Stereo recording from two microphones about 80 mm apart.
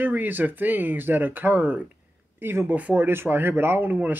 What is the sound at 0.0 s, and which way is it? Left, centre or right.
Speech, right.